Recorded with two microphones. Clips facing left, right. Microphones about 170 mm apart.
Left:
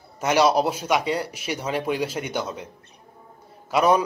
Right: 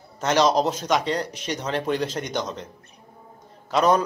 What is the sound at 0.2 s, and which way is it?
Speech, 10° left (ahead or behind).